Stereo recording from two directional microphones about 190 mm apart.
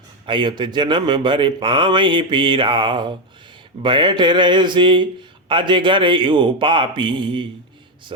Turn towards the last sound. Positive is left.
turn(degrees=-25)  # may be behind; listen again after turning